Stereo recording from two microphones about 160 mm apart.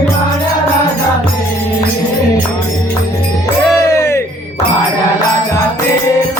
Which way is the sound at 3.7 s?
15° left (ahead or behind).